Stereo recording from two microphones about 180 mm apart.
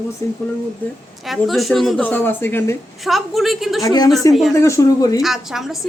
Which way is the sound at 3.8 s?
20° left (ahead or behind).